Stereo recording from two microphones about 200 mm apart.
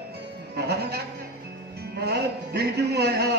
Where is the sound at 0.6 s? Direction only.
55° right (ahead or behind).